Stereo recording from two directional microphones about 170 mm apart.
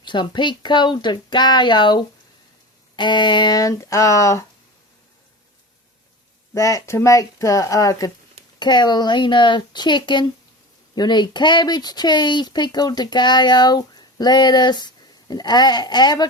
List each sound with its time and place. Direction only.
0.0 s speech: 25° left (ahead or behind)
6.5 s speech: 20° left (ahead or behind)